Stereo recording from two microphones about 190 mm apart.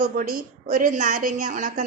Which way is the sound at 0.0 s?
45° right (ahead or behind).